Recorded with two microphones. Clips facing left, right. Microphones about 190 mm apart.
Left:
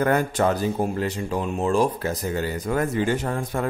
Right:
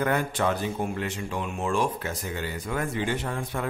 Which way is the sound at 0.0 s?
45° left (ahead or behind).